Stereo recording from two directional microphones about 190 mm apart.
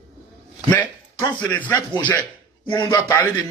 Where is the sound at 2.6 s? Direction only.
25° left (ahead or behind).